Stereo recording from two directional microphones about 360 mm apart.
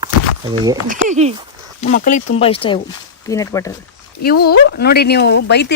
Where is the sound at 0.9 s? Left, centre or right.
Right.